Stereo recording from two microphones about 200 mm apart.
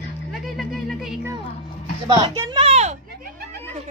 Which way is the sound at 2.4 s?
20° right (ahead or behind).